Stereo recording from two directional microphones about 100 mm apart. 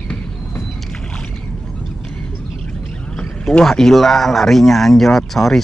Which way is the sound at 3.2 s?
5° left (ahead or behind).